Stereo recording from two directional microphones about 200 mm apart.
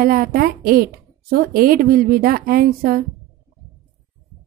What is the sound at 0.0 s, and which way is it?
A woman's voice, 50° right (ahead or behind).